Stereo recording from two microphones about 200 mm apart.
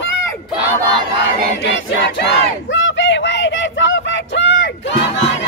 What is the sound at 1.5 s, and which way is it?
Battle cry, 60° left (ahead or behind).